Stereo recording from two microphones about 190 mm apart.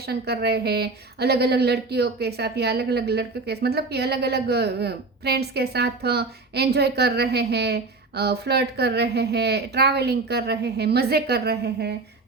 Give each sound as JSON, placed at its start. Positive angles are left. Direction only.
{"t": 0.1, "sound": "speech", "side_deg": -55}